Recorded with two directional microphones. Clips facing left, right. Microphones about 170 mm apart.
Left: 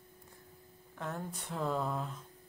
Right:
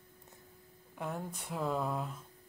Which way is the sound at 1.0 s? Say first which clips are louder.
Right 1 dB; 10° right (ahead or behind).